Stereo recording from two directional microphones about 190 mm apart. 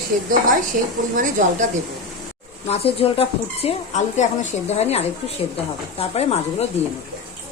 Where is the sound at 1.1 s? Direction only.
45° right (ahead or behind).